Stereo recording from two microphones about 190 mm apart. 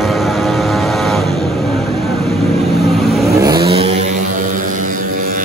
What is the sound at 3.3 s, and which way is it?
Vehicle, 20° right (ahead or behind).